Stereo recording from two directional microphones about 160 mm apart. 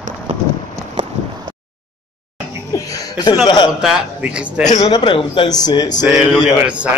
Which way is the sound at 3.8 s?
5° right (ahead or behind).